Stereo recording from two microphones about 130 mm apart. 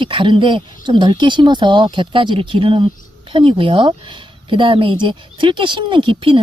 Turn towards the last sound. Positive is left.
turn(degrees=-40)  # may be behind; listen again after turning